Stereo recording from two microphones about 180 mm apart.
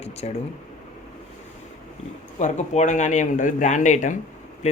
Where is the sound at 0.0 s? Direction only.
35° left (ahead or behind).